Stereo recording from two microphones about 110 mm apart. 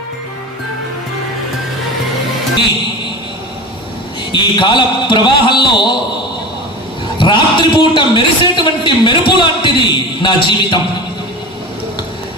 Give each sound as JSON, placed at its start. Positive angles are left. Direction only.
{"t": 4.3, "sound": "a man's voice", "side_deg": 45}
{"t": 7.2, "sound": "a man's voice", "side_deg": 50}